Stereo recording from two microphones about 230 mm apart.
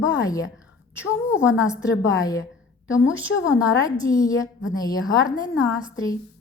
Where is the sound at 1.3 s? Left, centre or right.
Centre.